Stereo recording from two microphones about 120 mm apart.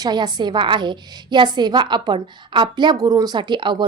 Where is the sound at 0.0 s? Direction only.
35° right (ahead or behind).